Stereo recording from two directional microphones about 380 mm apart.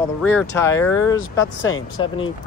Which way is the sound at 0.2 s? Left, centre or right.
Centre.